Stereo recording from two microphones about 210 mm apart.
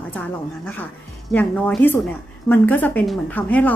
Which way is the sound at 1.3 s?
10° left (ahead or behind).